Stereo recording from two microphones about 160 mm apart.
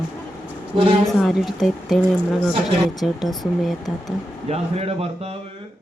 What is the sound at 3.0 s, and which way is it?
Speech, centre (ahead or behind).